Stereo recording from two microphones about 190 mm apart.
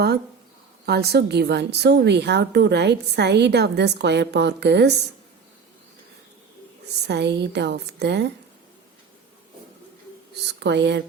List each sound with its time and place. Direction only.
0.9 s a woman's voice: 60° right (ahead or behind)
7.1 s a woman's voice: 65° right (ahead or behind)
10.6 s a woman's voice: 65° right (ahead or behind)